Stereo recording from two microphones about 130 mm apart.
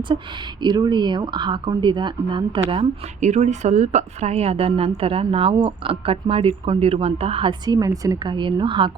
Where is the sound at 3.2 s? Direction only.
60° right (ahead or behind).